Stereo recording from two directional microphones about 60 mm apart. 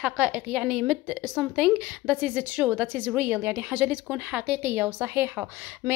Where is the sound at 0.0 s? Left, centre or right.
Centre.